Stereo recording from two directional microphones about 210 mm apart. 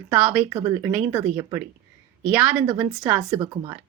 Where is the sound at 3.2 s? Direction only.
15° right (ahead or behind).